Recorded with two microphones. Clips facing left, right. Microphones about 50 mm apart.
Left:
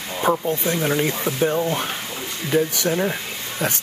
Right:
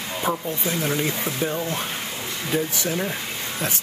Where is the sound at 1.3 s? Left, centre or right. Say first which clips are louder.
Left 4 dB; left.